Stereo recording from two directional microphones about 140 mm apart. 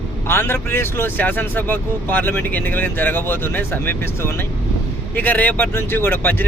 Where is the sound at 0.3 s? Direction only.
15° left (ahead or behind).